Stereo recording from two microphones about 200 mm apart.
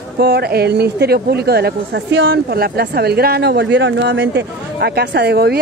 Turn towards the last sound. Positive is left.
turn(degrees=-55)  # may be behind; listen again after turning